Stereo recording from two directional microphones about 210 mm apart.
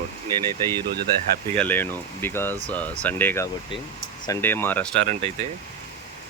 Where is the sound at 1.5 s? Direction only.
5° left (ahead or behind).